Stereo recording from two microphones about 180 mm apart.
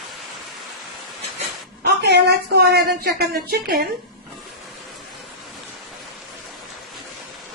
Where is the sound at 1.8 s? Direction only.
65° right (ahead or behind).